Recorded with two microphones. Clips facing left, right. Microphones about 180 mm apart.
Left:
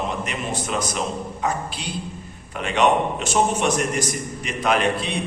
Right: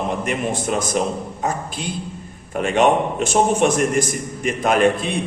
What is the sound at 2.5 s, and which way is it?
A man's voice, 50° right (ahead or behind).